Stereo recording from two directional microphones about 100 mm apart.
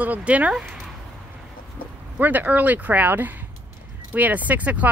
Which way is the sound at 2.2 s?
20° right (ahead or behind).